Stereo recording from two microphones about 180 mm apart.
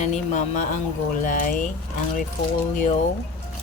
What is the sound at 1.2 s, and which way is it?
Speech, 45° left (ahead or behind).